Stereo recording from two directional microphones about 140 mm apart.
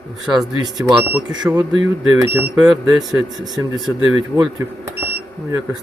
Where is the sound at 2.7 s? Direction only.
25° right (ahead or behind).